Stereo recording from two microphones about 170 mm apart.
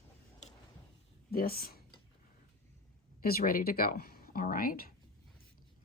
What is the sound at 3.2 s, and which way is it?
Speech, 60° left (ahead or behind).